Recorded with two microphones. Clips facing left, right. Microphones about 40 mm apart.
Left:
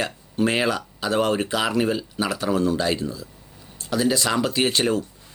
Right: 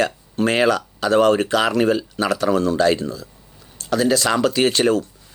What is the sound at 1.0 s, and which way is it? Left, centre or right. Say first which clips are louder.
Speech: right 7 dB; right.